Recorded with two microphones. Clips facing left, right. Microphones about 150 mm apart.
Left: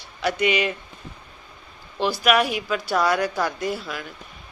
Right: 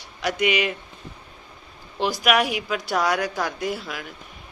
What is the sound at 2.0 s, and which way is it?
Speech, 15° right (ahead or behind).